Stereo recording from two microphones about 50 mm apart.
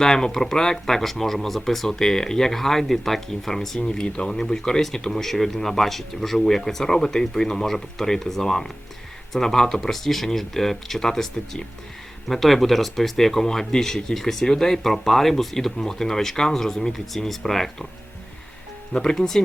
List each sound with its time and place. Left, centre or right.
0.0 s speech: centre
3.8 s speech: centre
19.1 s speech: centre